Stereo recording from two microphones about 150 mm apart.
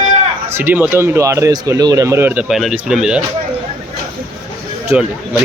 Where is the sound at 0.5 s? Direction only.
15° right (ahead or behind).